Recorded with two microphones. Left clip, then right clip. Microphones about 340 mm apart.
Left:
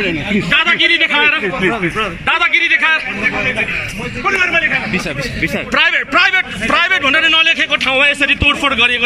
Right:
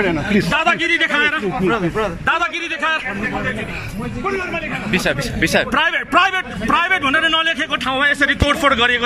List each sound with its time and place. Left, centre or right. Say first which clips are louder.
0.5 s a man's voice: left 6 dB; centre
4.9 s speech: even; right
5.8 s a man's voice: left 6 dB; centre